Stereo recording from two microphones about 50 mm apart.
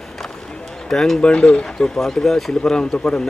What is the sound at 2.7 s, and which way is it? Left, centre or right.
Speech, centre.